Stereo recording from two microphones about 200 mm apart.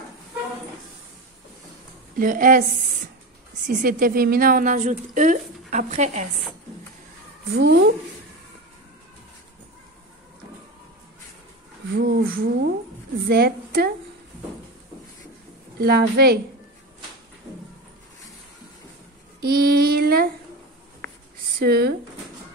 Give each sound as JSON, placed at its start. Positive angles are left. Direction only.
{"t": 2.1, "sound": "a woman's voice", "side_deg": -45}
{"t": 7.5, "sound": "a woman's voice", "side_deg": -55}
{"t": 11.9, "sound": "speech", "side_deg": -50}
{"t": 15.8, "sound": "speech", "side_deg": -50}
{"t": 19.4, "sound": "speech", "side_deg": -50}
{"t": 21.5, "sound": "speech", "side_deg": -50}